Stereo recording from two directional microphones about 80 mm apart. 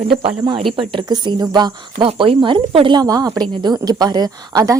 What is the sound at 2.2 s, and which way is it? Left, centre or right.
Speech, right.